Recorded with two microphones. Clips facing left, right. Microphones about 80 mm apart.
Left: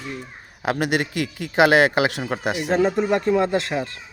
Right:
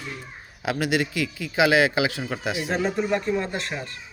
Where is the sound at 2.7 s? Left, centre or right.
Left.